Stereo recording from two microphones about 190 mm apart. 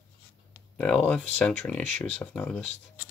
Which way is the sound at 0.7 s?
5° left (ahead or behind).